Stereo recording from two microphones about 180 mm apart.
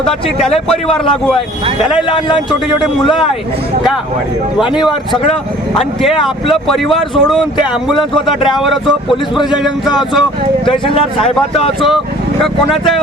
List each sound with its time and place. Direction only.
0.0 s speech: 5° left (ahead or behind)
2.0 s speech: 25° left (ahead or behind)
4.5 s speech: 5° right (ahead or behind)
4.8 s speech: 25° left (ahead or behind)
6.2 s speech: centre (ahead or behind)
10.7 s speech: 30° left (ahead or behind)
12.4 s speech: centre (ahead or behind)